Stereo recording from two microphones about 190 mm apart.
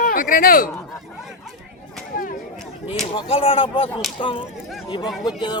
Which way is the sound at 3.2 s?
30° left (ahead or behind).